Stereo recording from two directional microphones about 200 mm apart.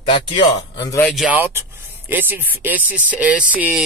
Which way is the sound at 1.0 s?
Centre (ahead or behind).